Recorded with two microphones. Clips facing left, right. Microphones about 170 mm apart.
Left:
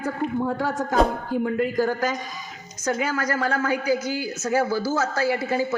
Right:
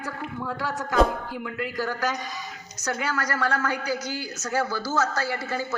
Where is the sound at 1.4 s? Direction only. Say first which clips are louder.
Left 7 dB; 50° left (ahead or behind).